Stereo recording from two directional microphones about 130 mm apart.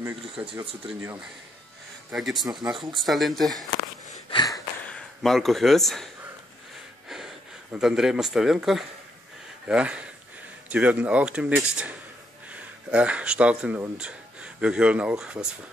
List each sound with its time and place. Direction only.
0.0 s speech: 15° right (ahead or behind)
2.0 s speech: centre (ahead or behind)
4.3 s a sound: 35° left (ahead or behind)
5.2 s speech: centre (ahead or behind)
7.7 s speech: 5° right (ahead or behind)